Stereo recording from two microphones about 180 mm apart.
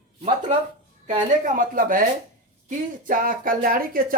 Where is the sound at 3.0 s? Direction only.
50° right (ahead or behind).